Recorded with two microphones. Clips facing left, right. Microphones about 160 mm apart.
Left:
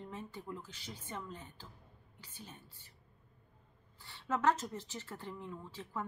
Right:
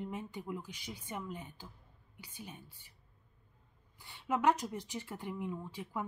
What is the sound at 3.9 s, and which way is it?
Speech, 15° right (ahead or behind).